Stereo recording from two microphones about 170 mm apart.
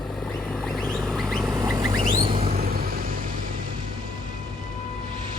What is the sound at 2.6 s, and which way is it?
Vehicle, 60° right (ahead or behind).